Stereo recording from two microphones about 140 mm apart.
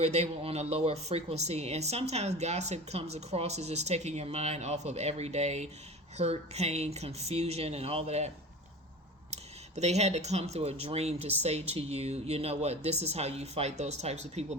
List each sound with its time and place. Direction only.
0.0 s speech: 50° right (ahead or behind)
9.3 s speech: 50° right (ahead or behind)